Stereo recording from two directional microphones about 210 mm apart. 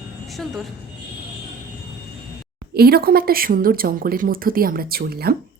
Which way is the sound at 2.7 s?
50° right (ahead or behind).